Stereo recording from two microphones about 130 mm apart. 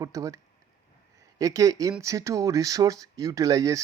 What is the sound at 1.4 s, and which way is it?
Speech, 25° right (ahead or behind).